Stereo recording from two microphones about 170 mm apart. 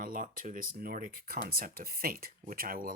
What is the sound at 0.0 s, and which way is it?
Speech, 55° right (ahead or behind).